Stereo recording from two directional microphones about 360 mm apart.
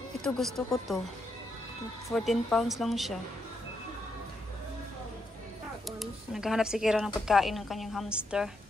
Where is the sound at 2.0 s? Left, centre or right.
Centre.